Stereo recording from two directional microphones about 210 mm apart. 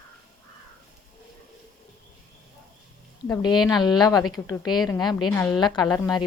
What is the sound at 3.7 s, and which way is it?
A woman's voice, 20° left (ahead or behind).